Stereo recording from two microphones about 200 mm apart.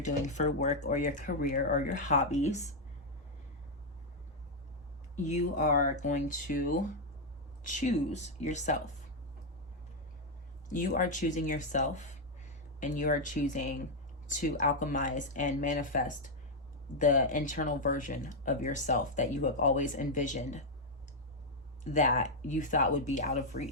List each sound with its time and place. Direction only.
0.0 s speech: 35° left (ahead or behind)
5.1 s speech: 35° left (ahead or behind)
10.7 s speech: 40° left (ahead or behind)
21.8 s speech: 35° left (ahead or behind)